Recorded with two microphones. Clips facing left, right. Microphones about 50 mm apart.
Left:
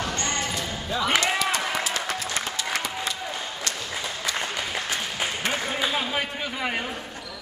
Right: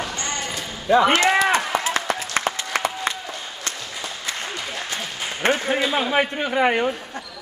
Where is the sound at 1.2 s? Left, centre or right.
Right.